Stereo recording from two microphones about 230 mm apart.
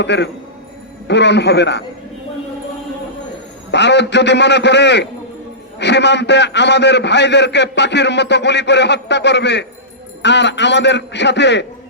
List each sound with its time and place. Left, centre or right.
0.0 s a man's voice: left
3.7 s a man's voice: left